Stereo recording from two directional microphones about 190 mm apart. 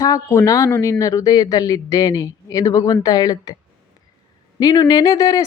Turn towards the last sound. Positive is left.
turn(degrees=20)  # may be behind; listen again after turning